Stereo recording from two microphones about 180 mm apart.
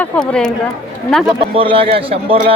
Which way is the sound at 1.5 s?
30° right (ahead or behind).